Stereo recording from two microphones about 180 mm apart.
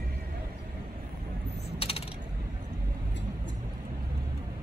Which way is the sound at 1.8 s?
35° left (ahead or behind).